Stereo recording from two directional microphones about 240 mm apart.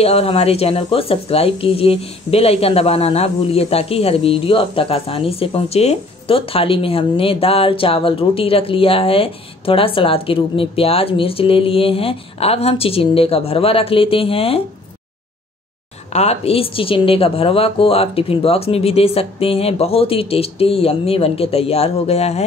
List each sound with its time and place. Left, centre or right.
0.0 s speech: left
16.1 s speech: left